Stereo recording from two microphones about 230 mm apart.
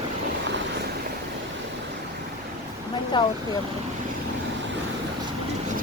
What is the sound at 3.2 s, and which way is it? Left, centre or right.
Speech, centre.